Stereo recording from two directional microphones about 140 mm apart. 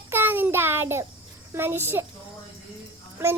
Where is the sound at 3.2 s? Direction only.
15° right (ahead or behind).